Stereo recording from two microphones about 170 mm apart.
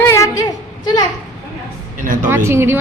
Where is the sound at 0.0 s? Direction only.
20° left (ahead or behind).